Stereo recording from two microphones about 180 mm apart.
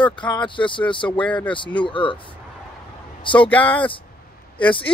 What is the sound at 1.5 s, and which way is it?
Speech, 25° left (ahead or behind).